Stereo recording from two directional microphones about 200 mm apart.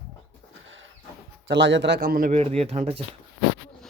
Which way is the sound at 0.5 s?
70° right (ahead or behind).